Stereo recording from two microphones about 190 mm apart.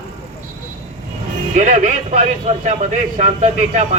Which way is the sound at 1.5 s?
40° right (ahead or behind).